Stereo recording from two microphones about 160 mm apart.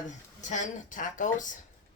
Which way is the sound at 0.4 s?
50° left (ahead or behind).